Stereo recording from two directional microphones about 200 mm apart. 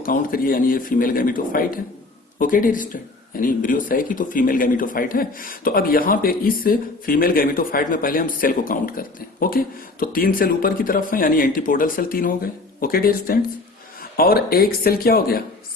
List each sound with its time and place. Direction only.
0.0 s speech: 45° left (ahead or behind)